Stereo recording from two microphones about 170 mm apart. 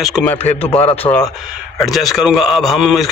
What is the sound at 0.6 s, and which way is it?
Speech, 35° left (ahead or behind).